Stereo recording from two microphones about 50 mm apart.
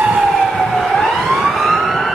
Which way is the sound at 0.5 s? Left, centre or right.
Centre.